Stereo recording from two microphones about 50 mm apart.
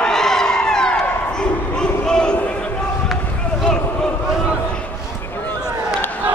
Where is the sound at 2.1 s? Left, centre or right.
Centre.